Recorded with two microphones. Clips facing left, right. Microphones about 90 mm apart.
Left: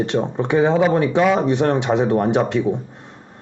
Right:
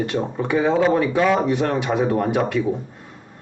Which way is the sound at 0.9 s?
25° left (ahead or behind).